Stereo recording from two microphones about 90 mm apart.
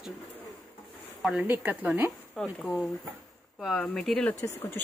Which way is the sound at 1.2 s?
10° right (ahead or behind).